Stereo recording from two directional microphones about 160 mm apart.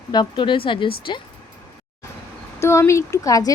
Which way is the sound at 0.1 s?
30° left (ahead or behind).